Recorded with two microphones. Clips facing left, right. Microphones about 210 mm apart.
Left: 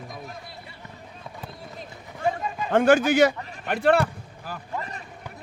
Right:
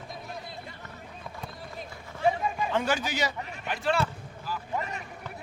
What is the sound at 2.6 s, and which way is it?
A man's voice, 50° left (ahead or behind).